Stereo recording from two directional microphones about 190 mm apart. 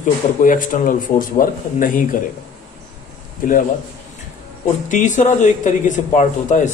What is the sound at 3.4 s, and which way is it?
Speech, 45° left (ahead or behind).